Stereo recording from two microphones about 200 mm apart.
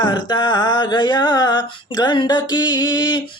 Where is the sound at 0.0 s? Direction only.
20° left (ahead or behind).